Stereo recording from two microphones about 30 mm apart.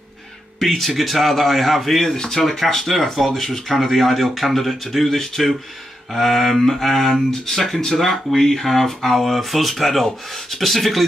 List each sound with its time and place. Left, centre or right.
0.6 s speech: centre
7.7 s speech: centre
8.0 s speech: centre